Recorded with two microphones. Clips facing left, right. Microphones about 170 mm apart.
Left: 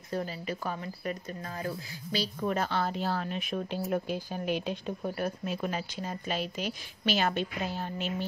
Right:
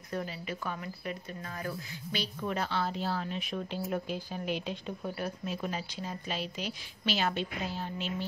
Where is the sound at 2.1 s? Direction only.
45° left (ahead or behind).